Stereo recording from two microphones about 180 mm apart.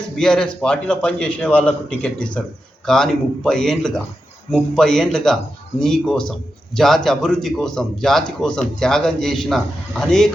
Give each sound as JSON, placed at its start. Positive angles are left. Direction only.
{"t": 0.2, "sound": "a man's voice", "side_deg": 5}